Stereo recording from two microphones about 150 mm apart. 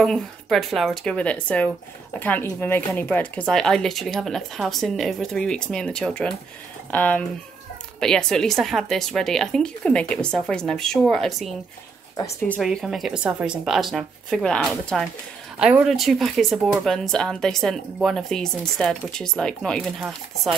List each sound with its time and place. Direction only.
0.0 s speech: centre (ahead or behind)